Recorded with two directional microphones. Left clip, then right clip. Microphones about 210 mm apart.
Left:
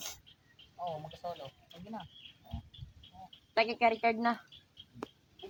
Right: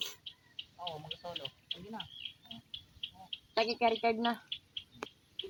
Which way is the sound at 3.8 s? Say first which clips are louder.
Left 1 dB; 10° left (ahead or behind).